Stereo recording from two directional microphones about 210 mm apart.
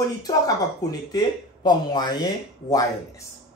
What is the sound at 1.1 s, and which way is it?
Speech, 20° left (ahead or behind).